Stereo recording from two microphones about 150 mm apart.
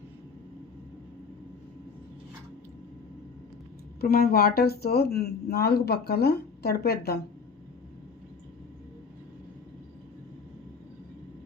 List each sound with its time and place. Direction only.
4.0 s speech: 90° left